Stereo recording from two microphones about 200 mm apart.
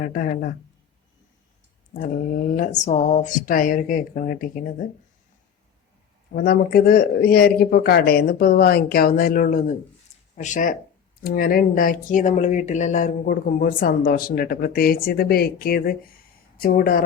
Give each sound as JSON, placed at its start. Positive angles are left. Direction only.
{"t": 0.0, "sound": "speech", "side_deg": 45}
{"t": 1.9, "sound": "speech", "side_deg": 45}
{"t": 6.3, "sound": "speech", "side_deg": 50}